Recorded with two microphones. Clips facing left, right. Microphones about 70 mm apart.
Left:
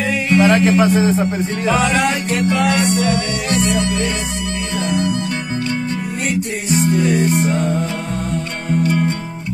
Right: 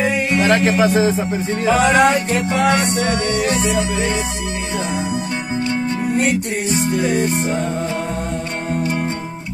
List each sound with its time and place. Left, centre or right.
0.0 s music: centre
0.5 s music: centre
1.7 s music: right
8.6 s music: right